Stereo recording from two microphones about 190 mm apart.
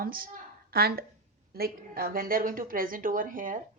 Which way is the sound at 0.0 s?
50° right (ahead or behind).